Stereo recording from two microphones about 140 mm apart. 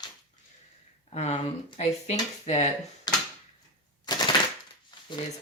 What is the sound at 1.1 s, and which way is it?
Speech, 50° left (ahead or behind).